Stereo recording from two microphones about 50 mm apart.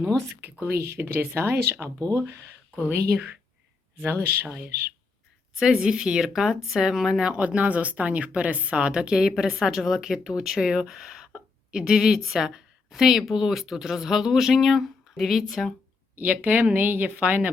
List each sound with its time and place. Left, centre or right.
0.6 s speech: right
1.8 s speech: right
2.7 s a woman's voice: right
4.0 s speech: right
5.5 s speech: centre
7.2 s speech: right; by 15.7 s centre
16.2 s a woman's voice: right